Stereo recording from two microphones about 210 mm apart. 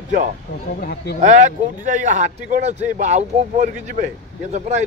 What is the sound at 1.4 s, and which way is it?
A man's voice, 35° right (ahead or behind).